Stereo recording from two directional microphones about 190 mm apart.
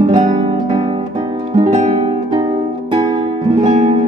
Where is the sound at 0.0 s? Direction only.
40° right (ahead or behind).